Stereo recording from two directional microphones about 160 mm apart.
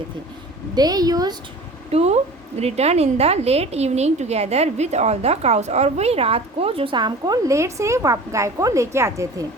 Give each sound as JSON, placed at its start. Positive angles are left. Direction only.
{"t": 0.8, "sound": "a woman's voice", "side_deg": -25}
{"t": 1.9, "sound": "a woman's voice", "side_deg": -40}